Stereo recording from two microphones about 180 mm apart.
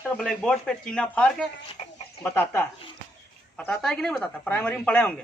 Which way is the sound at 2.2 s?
10° left (ahead or behind).